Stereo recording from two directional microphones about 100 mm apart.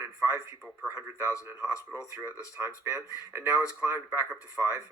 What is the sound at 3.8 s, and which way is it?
Speech, 20° right (ahead or behind).